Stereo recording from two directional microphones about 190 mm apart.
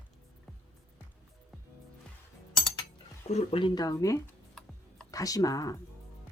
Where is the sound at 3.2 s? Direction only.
30° left (ahead or behind).